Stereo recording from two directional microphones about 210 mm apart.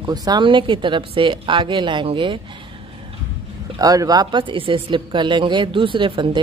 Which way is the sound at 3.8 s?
15° right (ahead or behind).